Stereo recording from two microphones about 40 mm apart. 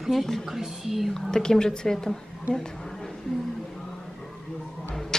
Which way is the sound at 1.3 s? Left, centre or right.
Centre.